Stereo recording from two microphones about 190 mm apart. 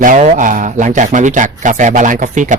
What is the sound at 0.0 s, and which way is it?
Speech, 45° right (ahead or behind).